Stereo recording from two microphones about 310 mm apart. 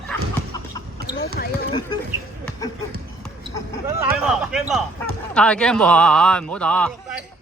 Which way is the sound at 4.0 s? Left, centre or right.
Centre.